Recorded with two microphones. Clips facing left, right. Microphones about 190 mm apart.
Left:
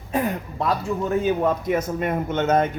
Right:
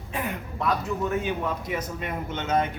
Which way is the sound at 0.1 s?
40° left (ahead or behind).